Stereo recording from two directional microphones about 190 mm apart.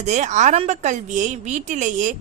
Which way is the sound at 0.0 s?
40° right (ahead or behind).